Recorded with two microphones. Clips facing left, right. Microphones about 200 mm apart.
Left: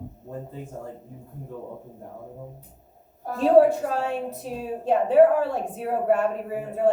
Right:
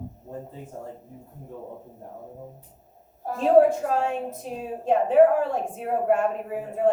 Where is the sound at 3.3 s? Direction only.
35° left (ahead or behind).